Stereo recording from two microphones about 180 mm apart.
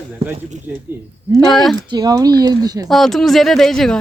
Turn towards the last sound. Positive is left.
turn(degrees=0)  # may be behind; listen again after turning